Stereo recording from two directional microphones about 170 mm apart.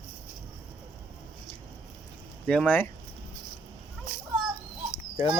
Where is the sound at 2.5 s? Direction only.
5° left (ahead or behind).